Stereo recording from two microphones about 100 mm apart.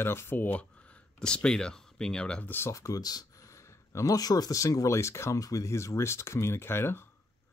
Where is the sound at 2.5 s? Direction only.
30° left (ahead or behind).